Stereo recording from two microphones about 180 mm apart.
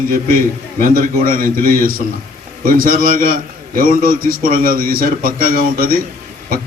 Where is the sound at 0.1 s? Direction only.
50° right (ahead or behind).